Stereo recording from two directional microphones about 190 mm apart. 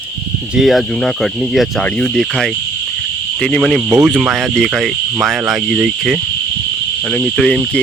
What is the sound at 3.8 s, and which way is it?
Speech, 15° right (ahead or behind).